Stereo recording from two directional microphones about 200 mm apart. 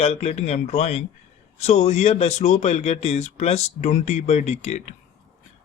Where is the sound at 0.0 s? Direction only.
30° left (ahead or behind).